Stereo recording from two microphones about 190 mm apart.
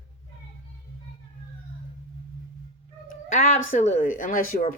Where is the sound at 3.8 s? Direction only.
40° left (ahead or behind).